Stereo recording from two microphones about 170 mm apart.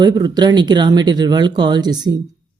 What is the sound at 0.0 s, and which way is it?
Speech, 25° right (ahead or behind).